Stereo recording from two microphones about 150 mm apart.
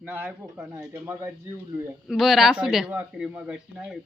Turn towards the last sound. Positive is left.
turn(degrees=-5)  # may be behind; listen again after turning